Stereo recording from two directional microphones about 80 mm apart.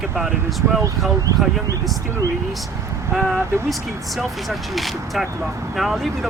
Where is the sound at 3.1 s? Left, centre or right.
Centre.